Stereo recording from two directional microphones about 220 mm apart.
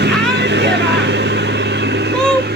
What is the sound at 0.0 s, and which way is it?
Vehicle, 50° right (ahead or behind).